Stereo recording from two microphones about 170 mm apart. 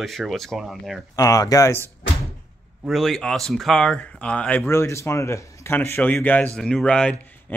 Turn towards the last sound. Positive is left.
turn(degrees=5)  # may be behind; listen again after turning